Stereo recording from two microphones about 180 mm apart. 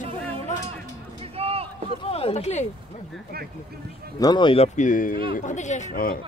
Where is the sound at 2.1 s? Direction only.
35° left (ahead or behind).